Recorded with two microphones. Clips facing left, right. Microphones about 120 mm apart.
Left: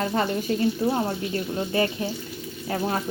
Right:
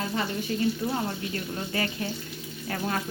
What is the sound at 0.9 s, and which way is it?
Speech, 30° left (ahead or behind).